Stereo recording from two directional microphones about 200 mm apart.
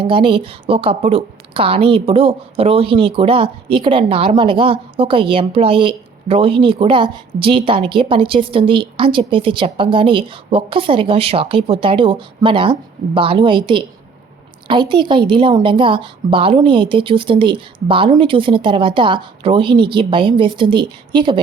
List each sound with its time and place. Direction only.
0.0 s a woman's voice: 25° right (ahead or behind)